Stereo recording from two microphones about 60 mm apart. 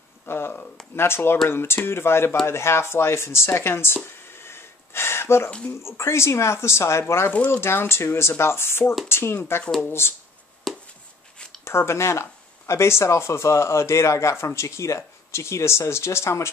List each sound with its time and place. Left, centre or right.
0.3 s speech: left
7.3 s speech: left
7.6 s speech: left
10.7 s a sound: centre
11.6 s speech: left